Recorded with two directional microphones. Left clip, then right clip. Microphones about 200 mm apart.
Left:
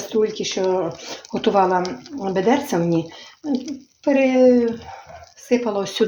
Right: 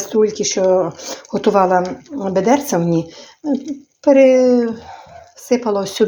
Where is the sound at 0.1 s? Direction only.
40° right (ahead or behind).